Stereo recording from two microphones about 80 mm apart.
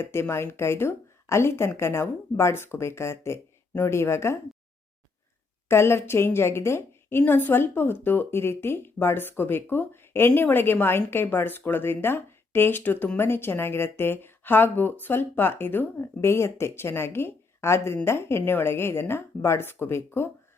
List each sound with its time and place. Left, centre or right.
0.0 s speech: left
5.6 s speech: left